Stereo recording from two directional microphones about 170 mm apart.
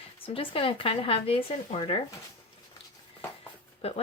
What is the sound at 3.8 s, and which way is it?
Speech, 35° left (ahead or behind).